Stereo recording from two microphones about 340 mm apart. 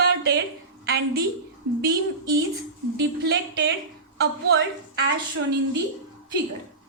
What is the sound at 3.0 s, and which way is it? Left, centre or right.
A woman's voice, right.